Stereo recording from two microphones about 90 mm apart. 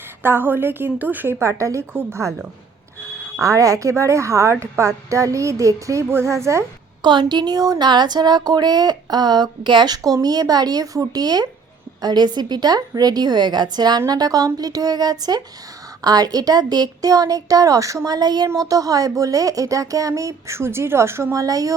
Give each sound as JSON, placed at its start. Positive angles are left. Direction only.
{"t": 0.2, "sound": "a woman's voice", "side_deg": -25}
{"t": 3.4, "sound": "speech", "side_deg": -35}
{"t": 7.0, "sound": "speech", "side_deg": -60}
{"t": 21.4, "sound": "speech", "side_deg": -40}